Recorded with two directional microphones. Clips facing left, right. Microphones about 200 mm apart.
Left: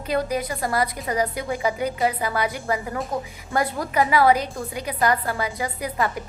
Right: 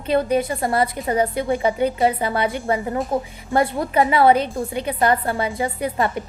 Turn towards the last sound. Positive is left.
turn(degrees=-30)  # may be behind; listen again after turning